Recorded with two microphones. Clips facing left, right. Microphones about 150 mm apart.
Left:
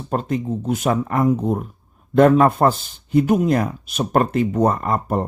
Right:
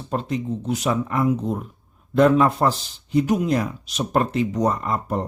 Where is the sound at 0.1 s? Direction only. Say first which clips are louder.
Left 3 dB; 50° left (ahead or behind).